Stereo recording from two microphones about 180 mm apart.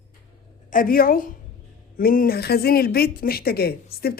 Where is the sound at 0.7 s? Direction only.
50° left (ahead or behind).